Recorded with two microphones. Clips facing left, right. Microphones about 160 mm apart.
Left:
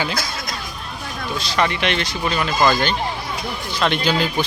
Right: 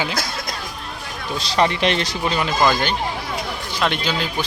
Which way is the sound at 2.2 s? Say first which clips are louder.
Left 1 dB; 20° right (ahead or behind).